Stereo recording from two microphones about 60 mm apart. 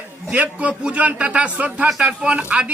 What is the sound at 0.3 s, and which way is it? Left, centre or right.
A man's voice, right.